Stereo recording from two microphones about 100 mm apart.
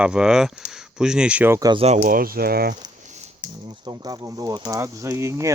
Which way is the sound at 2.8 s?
45° right (ahead or behind).